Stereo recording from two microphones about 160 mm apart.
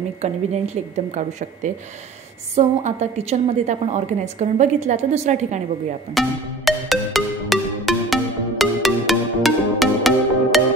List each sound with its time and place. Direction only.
0.2 s a woman's voice: 45° right (ahead or behind)
6.1 s music: centre (ahead or behind)